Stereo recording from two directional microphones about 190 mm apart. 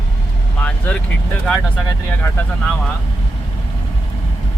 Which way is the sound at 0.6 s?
10° left (ahead or behind).